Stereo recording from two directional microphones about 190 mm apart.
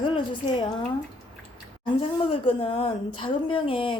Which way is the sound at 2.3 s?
30° left (ahead or behind).